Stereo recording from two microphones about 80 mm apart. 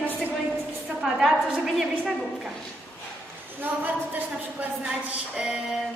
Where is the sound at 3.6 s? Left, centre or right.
Right.